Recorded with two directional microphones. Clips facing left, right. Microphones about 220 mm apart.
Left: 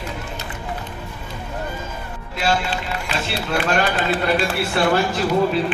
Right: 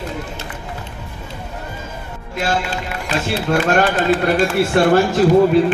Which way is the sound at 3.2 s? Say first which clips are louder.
Right 5 dB; 45° right (ahead or behind).